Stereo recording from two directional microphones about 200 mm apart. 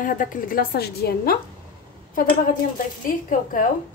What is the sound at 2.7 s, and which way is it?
Speech, 45° left (ahead or behind).